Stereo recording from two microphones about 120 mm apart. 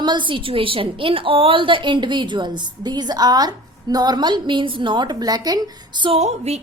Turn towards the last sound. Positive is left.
turn(degrees=-60)  # may be behind; listen again after turning